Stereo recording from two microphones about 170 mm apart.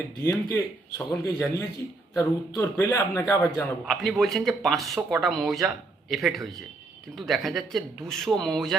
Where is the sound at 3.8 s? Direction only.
Centre (ahead or behind).